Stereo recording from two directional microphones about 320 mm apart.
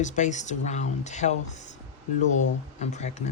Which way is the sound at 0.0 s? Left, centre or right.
Left.